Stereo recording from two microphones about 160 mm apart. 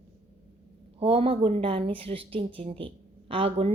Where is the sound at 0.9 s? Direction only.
35° right (ahead or behind).